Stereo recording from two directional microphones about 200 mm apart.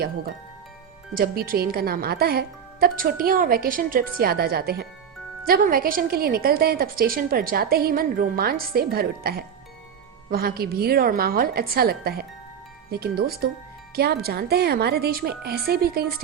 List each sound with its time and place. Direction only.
1.1 s a woman's voice: 45° right (ahead or behind)